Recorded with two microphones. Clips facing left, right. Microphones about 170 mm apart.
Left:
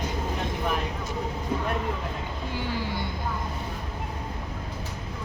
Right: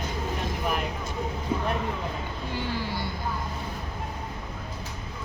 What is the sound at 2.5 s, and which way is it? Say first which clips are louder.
Vehicle: even; 15° left (ahead or behind).